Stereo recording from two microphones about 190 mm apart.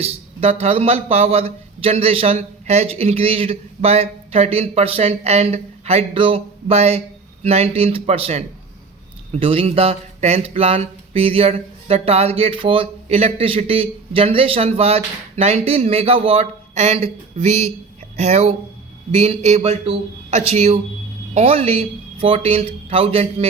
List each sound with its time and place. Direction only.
0.0 s speech: 35° right (ahead or behind)